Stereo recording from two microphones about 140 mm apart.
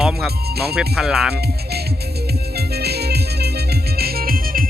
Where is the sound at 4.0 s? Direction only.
90° right.